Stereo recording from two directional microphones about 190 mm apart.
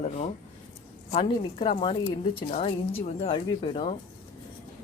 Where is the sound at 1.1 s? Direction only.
30° left (ahead or behind).